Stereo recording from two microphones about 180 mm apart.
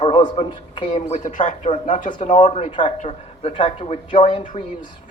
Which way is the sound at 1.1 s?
45° left (ahead or behind).